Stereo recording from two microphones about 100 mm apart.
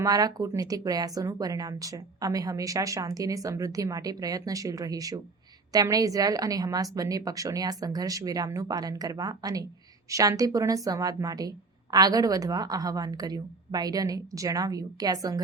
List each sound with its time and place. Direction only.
0.0 s speech: 40° right (ahead or behind)